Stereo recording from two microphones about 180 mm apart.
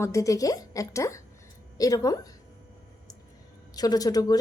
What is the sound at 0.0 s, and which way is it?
A woman's voice, 15° left (ahead or behind).